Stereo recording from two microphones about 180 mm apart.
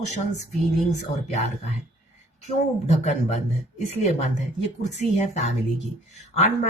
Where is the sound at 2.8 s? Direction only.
40° left (ahead or behind).